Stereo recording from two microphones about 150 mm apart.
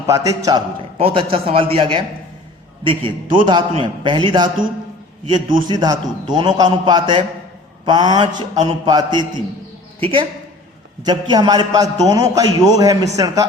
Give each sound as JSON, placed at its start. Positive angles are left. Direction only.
{"t": 0.1, "sound": "a man's voice", "side_deg": -25}
{"t": 0.9, "sound": "a man's voice", "side_deg": -40}
{"t": 5.6, "sound": "a man's voice", "side_deg": -25}